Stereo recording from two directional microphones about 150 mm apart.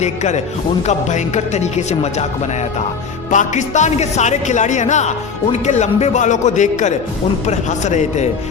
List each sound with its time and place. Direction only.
0.0 s a man's voice: 50° left (ahead or behind)
3.2 s a man's voice: 55° left (ahead or behind)